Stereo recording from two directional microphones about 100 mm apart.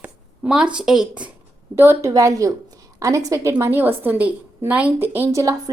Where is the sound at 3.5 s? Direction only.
20° right (ahead or behind).